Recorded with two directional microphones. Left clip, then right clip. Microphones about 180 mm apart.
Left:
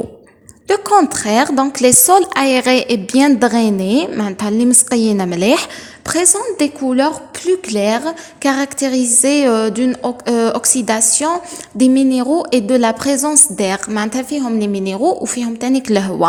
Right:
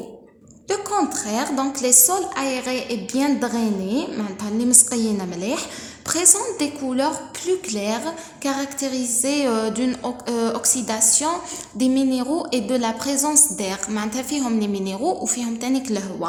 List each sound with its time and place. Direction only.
0.7 s a woman's voice: 50° left (ahead or behind)
6.1 s a woman's voice: 45° left (ahead or behind)